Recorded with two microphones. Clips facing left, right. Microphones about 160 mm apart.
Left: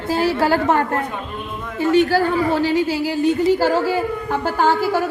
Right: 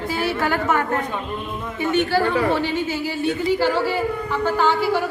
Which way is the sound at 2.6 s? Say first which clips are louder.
Left 5 dB; 90° left.